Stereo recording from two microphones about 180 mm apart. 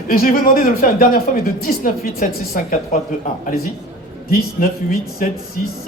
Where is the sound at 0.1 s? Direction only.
55° left (ahead or behind).